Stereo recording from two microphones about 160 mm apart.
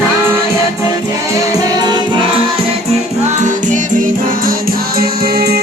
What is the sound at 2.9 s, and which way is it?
Music, 45° right (ahead or behind).